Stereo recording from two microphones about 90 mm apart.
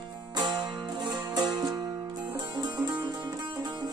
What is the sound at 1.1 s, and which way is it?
Music, 50° right (ahead or behind).